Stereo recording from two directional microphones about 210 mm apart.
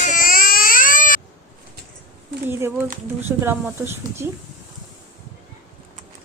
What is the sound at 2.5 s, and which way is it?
Speech, 10° right (ahead or behind).